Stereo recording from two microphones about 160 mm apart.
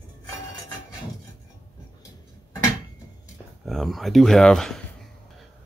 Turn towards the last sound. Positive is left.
turn(degrees=5)  # may be behind; listen again after turning